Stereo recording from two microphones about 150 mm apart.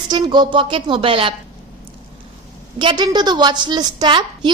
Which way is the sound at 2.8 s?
30° right (ahead or behind).